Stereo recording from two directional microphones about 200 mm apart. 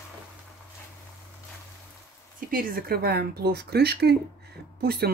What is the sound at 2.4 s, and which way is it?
Speech, 45° right (ahead or behind).